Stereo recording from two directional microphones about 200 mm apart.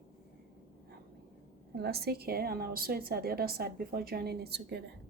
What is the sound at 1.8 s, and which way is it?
A woman's voice, 50° right (ahead or behind).